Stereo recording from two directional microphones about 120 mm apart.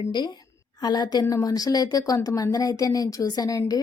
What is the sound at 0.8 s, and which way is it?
A woman's voice, 35° left (ahead or behind).